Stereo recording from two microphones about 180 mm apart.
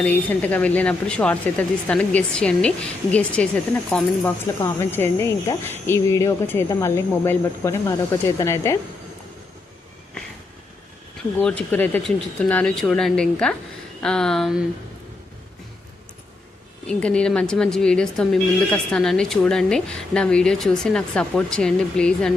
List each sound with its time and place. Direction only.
0.0 s speech: 10° left (ahead or behind)
11.3 s speech: 10° left (ahead or behind)
16.8 s speech: 5° left (ahead or behind)